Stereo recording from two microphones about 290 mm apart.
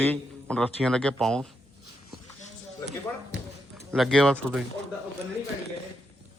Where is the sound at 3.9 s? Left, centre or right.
Centre.